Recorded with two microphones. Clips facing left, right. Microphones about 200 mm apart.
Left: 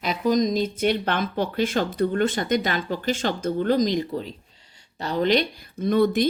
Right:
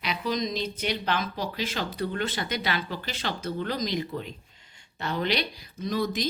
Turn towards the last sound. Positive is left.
turn(degrees=60)  # may be behind; listen again after turning